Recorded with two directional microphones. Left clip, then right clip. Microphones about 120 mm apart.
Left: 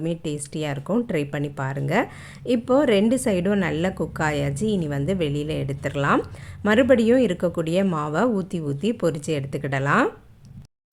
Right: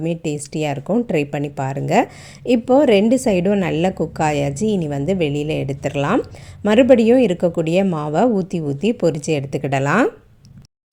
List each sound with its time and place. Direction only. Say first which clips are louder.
0.0 s speech: right 5 dB; 25° right (ahead or behind)